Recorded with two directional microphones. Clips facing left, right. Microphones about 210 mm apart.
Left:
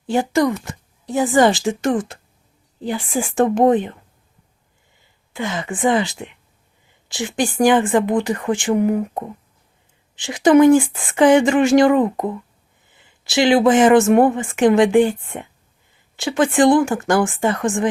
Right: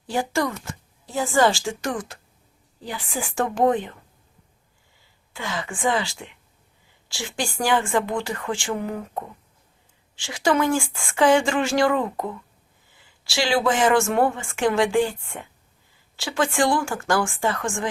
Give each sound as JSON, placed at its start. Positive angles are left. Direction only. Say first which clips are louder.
{"t": 0.1, "sound": "speech", "louder": "left 7 dB", "side_deg": 20}
{"t": 5.3, "sound": "speech", "louder": "left 6 dB", "side_deg": 20}